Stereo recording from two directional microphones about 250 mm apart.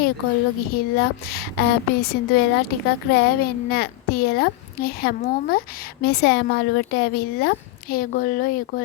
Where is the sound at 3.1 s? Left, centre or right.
Left.